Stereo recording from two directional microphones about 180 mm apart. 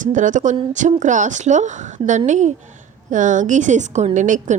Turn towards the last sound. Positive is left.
turn(degrees=-45)  # may be behind; listen again after turning